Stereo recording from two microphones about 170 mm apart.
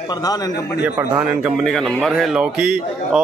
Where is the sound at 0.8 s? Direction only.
10° right (ahead or behind).